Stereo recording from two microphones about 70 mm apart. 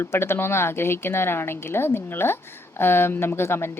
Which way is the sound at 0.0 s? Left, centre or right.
Left.